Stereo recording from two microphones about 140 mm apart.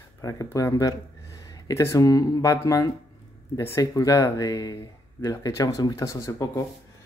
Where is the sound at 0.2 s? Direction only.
25° left (ahead or behind).